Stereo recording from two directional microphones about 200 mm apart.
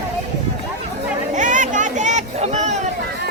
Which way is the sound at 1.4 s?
40° right (ahead or behind).